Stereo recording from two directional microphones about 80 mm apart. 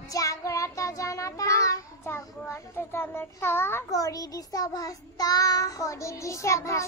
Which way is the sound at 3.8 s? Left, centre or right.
Left.